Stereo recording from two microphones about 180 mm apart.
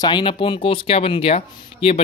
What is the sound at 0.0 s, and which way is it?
Speech, 25° left (ahead or behind).